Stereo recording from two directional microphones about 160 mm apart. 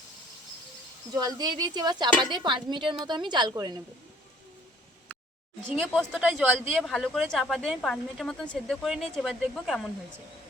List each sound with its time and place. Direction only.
1.1 s speech: 25° right (ahead or behind)
5.1 s a sound: 10° left (ahead or behind)
5.8 s speech: 5° left (ahead or behind)